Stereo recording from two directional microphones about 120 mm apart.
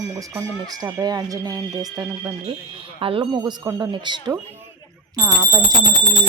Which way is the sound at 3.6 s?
25° right (ahead or behind).